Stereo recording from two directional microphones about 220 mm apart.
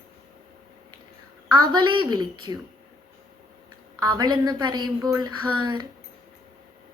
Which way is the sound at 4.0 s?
20° right (ahead or behind).